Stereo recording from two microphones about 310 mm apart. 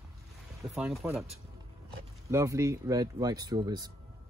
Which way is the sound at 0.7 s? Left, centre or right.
Centre.